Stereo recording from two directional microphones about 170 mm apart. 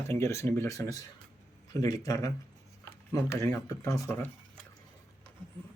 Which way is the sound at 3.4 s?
15° left (ahead or behind).